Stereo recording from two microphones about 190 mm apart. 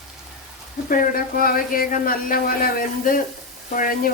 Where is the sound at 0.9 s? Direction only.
50° left (ahead or behind).